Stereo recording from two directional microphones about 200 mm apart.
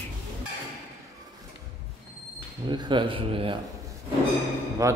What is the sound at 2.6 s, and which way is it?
Speech, 20° right (ahead or behind).